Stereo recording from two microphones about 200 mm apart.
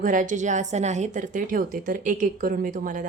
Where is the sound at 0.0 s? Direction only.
40° right (ahead or behind).